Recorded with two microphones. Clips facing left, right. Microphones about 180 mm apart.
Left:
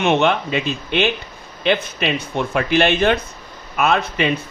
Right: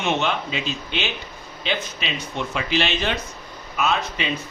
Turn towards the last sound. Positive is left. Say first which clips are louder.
# left 6 dB
turn(degrees=60)  # may be behind; listen again after turning